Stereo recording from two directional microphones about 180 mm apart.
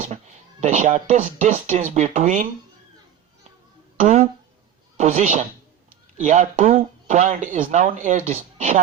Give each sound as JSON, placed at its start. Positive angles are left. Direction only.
{"t": 0.6, "sound": "speech", "side_deg": -40}
{"t": 3.9, "sound": "a man's voice", "side_deg": -45}